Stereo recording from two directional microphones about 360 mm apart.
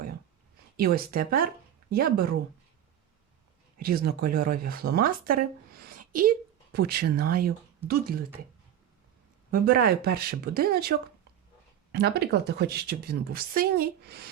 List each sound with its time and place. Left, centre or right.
1.1 s a woman's voice: right
3.8 s a woman's voice: right
5.9 s a sound: right
6.7 s a woman's voice: right
9.5 s a woman's voice: right